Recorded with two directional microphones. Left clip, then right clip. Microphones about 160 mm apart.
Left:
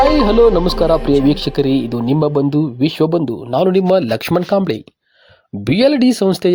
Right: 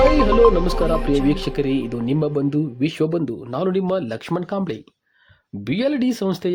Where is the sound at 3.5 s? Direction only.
30° left (ahead or behind).